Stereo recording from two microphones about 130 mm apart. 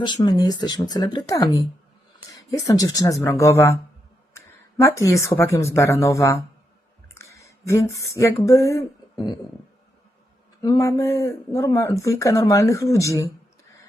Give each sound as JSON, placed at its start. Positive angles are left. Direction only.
{"t": 0.0, "sound": "speech", "side_deg": 35}
{"t": 2.5, "sound": "speech", "side_deg": 25}
{"t": 7.2, "sound": "a sound", "side_deg": 25}
{"t": 8.2, "sound": "speech", "side_deg": 25}
{"t": 10.6, "sound": "speech", "side_deg": 25}